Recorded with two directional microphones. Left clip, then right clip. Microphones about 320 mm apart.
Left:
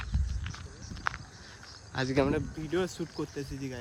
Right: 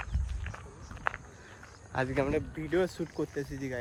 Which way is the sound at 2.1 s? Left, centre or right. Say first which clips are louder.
Left 5 dB; left.